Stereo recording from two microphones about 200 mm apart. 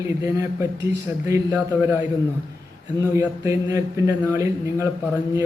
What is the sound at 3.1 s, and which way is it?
A man's voice, 15° right (ahead or behind).